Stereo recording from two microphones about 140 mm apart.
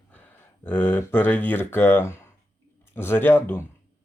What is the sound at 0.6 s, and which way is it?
Speech, 15° left (ahead or behind).